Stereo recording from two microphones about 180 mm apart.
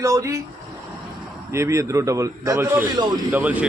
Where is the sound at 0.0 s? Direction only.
20° right (ahead or behind).